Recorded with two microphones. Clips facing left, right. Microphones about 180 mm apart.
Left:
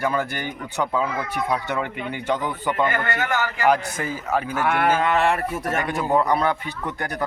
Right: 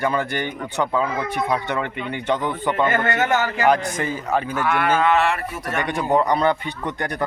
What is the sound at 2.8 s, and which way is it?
Speech, 25° right (ahead or behind).